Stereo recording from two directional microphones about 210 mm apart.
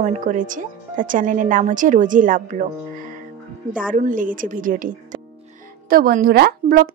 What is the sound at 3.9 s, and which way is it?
A woman's voice, 40° right (ahead or behind).